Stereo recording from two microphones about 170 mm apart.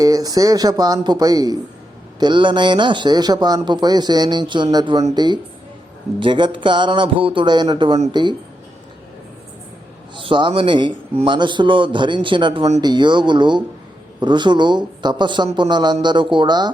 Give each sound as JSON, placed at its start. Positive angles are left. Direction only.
{"t": 0.0, "sound": "speech", "side_deg": -20}
{"t": 10.2, "sound": "speech", "side_deg": -30}